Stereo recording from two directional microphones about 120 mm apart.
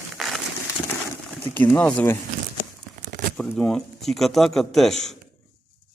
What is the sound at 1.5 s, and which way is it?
Speech, 15° left (ahead or behind).